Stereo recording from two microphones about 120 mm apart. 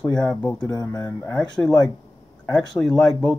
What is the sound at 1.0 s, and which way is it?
Speech, 15° left (ahead or behind).